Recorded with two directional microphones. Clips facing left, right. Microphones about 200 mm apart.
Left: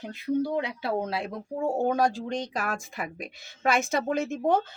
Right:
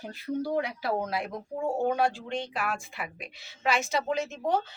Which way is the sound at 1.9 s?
40° left (ahead or behind).